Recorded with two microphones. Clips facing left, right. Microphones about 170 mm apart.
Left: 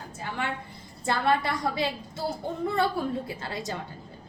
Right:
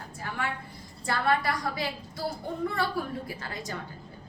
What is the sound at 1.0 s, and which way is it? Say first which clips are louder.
A woman's voice: left 2 dB; 25° left (ahead or behind).